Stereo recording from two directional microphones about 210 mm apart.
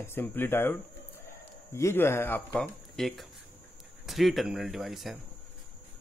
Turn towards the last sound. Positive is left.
turn(degrees=0)  # may be behind; listen again after turning